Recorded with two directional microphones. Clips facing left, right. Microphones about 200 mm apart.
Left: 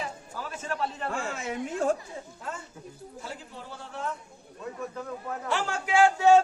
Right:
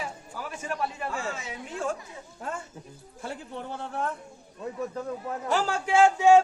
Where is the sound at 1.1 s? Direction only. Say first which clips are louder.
Left 1 dB; 55° left (ahead or behind).